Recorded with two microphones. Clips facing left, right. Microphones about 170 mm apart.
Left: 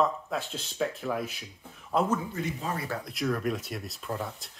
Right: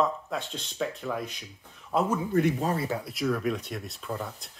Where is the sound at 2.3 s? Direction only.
55° right (ahead or behind).